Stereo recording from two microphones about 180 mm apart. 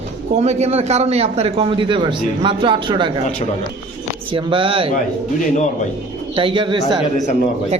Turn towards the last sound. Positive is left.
turn(degrees=-25)  # may be behind; listen again after turning